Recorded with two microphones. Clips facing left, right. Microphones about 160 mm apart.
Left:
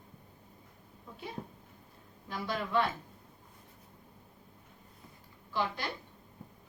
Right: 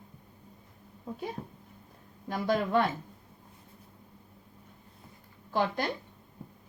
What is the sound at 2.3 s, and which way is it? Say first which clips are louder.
Speech: right 7 dB; 50° right (ahead or behind).